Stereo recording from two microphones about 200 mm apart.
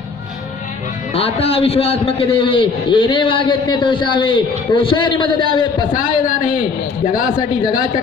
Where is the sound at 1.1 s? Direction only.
30° left (ahead or behind).